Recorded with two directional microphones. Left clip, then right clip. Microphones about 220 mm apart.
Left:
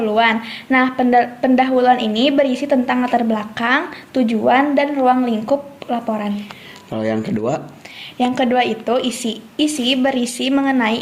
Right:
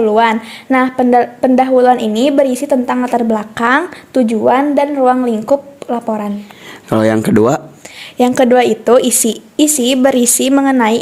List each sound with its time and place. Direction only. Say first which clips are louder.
0.0 s a woman's voice: right 5 dB; 40° right (ahead or behind)